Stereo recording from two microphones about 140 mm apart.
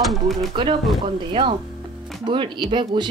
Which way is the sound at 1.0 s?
40° right (ahead or behind).